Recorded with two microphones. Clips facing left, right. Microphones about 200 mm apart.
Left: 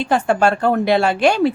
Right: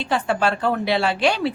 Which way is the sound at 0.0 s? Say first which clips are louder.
Left 5 dB; 50° left (ahead or behind).